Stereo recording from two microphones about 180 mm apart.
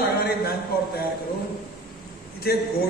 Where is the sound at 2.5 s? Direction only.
60° left (ahead or behind).